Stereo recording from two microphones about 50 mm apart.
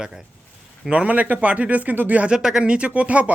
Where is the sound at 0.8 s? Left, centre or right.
Right.